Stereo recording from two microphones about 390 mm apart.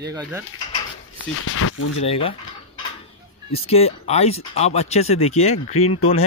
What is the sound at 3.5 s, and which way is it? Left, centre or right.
Speech, centre.